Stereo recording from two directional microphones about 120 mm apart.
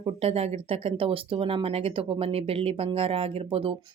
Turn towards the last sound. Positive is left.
turn(degrees=-50)  # may be behind; listen again after turning